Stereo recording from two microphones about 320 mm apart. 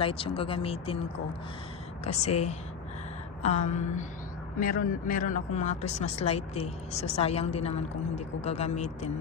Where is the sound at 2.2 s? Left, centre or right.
Centre.